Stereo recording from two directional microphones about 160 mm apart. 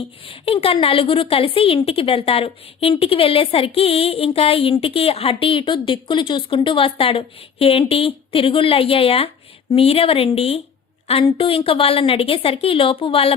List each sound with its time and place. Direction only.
0.3 s speech: 35° left (ahead or behind)